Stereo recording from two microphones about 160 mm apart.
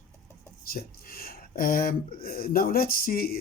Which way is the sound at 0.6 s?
65° left (ahead or behind).